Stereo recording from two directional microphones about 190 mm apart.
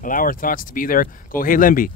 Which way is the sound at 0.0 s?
45° left (ahead or behind).